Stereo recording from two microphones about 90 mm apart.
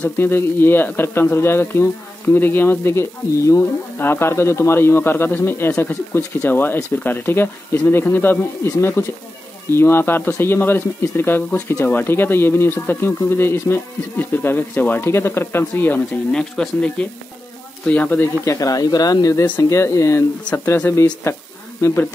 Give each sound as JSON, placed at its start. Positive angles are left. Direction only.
{"t": 0.2, "sound": "speech", "side_deg": 25}
{"t": 16.3, "sound": "speech", "side_deg": 10}
{"t": 18.4, "sound": "speech", "side_deg": 40}
{"t": 19.7, "sound": "speech", "side_deg": 35}